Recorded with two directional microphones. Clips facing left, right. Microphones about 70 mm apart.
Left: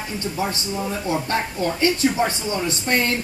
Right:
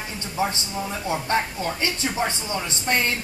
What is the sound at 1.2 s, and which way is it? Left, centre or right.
Music, right.